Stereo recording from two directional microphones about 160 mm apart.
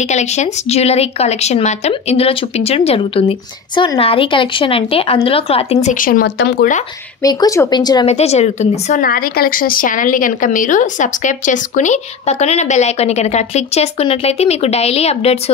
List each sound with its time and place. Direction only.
0.1 s speech: 45° left (ahead or behind); by 6.7 s 90° left
7.2 s speech: 20° left (ahead or behind)
8.1 s speech: 40° left (ahead or behind)
9.0 s speech: 65° left (ahead or behind); by 15.5 s 40° left (ahead or behind)